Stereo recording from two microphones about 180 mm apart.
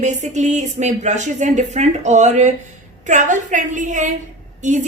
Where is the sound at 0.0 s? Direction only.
40° right (ahead or behind).